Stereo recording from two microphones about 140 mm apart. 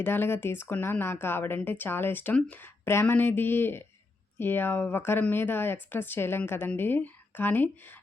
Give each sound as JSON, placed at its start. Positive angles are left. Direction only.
{"t": 0.0, "sound": "speech", "side_deg": 15}